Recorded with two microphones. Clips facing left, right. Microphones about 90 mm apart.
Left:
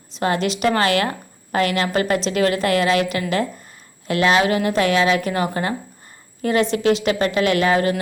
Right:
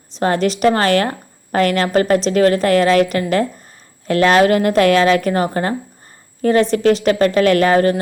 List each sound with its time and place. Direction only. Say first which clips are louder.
0.2 s a woman's voice: right 4 dB; 40° right (ahead or behind)